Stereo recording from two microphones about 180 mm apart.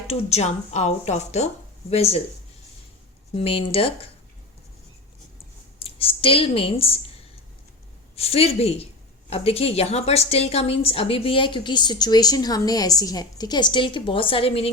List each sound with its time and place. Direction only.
0.1 s speech: 35° left (ahead or behind)
3.3 s speech: 30° left (ahead or behind)
5.8 s speech: 30° left (ahead or behind)
8.1 s a woman's voice: 35° left (ahead or behind)